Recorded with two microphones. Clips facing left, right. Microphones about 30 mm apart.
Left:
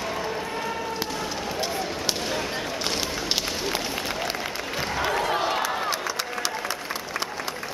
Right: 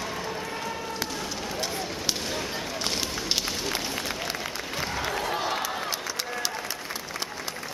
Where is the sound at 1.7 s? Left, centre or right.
Centre.